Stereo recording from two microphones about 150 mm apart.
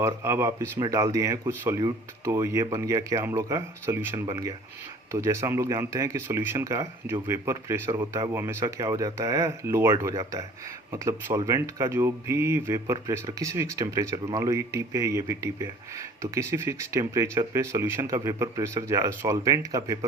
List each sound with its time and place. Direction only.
0.0 s speech: 15° right (ahead or behind)